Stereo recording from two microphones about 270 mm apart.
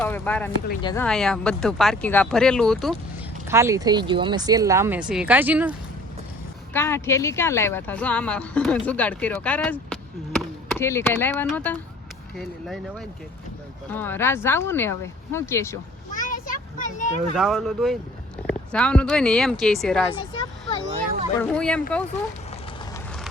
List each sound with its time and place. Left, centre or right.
0.0 s speech: centre
1.0 s speech: centre
3.4 s speech: centre
6.7 s speech: centre
16.1 s vehicle: left
17.3 s speech: centre
20.1 s speech: centre
21.4 s speech: centre